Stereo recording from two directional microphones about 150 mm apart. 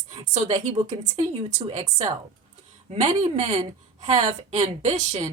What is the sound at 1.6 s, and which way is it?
A woman's voice, 50° right (ahead or behind).